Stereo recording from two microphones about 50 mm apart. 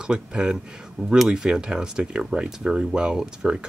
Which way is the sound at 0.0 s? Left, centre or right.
Centre.